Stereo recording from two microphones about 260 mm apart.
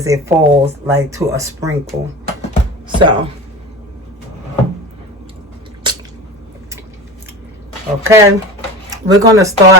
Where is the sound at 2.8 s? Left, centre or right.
Centre.